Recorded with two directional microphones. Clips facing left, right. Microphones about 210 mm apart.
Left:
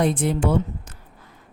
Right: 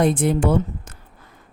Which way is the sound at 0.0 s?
50° right (ahead or behind).